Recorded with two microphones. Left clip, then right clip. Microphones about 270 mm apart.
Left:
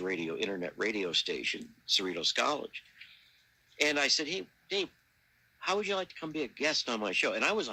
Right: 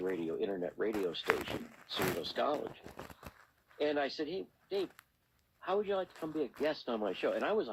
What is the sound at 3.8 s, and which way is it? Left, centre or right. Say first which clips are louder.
Speech: left 6 dB; left.